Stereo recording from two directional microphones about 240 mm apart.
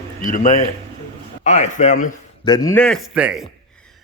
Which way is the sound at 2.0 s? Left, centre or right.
Centre.